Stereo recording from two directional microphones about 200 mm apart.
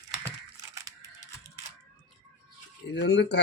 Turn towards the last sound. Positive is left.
turn(degrees=55)  # may be behind; listen again after turning